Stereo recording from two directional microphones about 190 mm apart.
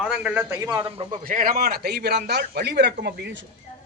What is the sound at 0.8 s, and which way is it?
Speech, 30° right (ahead or behind).